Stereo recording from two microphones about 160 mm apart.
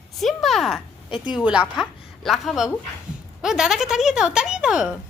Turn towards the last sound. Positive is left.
turn(degrees=-5)  # may be behind; listen again after turning